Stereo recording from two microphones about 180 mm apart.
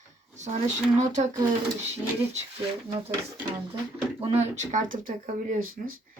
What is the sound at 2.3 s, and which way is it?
Speech, 35° right (ahead or behind).